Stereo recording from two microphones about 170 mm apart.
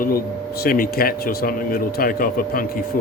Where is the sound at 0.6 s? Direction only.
60° left (ahead or behind).